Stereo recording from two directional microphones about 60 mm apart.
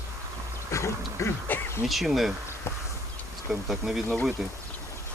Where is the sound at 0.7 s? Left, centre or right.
Left.